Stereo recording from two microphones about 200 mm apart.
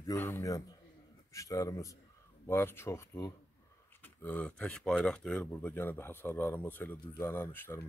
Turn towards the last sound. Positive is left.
turn(degrees=10)  # may be behind; listen again after turning